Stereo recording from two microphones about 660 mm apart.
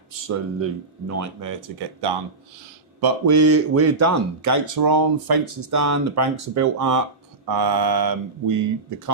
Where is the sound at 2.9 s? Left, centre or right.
Right.